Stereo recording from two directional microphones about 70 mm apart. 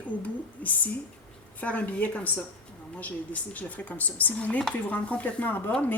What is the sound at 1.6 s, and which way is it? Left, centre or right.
Speech, left.